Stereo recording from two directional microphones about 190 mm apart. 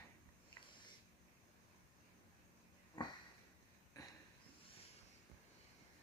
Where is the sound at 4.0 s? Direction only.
20° left (ahead or behind).